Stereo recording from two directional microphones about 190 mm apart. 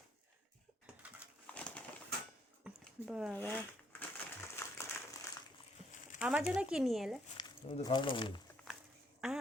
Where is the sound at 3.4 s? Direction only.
10° left (ahead or behind).